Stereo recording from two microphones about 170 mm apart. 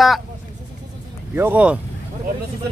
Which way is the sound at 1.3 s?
10° right (ahead or behind).